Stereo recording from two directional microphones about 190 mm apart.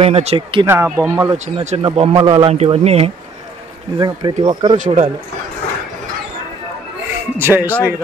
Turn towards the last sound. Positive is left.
turn(degrees=-10)  # may be behind; listen again after turning